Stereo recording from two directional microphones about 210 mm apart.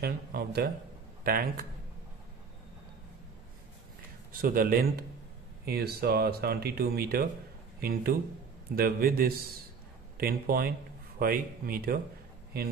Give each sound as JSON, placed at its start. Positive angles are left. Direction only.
{"t": 0.0, "sound": "speech", "side_deg": -45}
{"t": 4.3, "sound": "speech", "side_deg": -40}